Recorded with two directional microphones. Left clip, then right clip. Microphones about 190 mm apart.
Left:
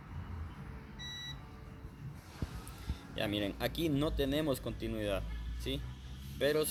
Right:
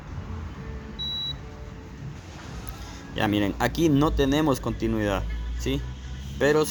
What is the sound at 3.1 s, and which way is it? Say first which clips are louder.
Speech: right 11 dB; 45° right (ahead or behind).